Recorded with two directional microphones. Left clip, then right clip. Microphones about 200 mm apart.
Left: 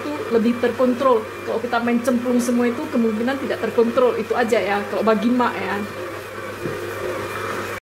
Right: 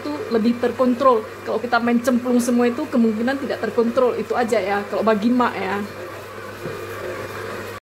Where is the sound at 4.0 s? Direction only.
25° right (ahead or behind).